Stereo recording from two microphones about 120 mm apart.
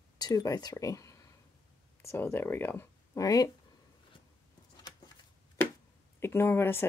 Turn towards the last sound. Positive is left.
turn(degrees=20)  # may be behind; listen again after turning